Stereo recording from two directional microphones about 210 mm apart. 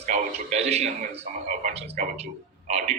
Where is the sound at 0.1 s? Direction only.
30° right (ahead or behind).